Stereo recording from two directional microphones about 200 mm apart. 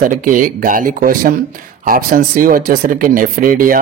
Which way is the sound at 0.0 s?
45° right (ahead or behind).